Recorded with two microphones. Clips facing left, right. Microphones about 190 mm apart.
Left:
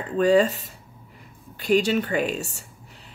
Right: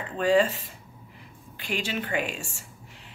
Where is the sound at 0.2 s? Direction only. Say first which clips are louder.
Left 4 dB; 40° left (ahead or behind).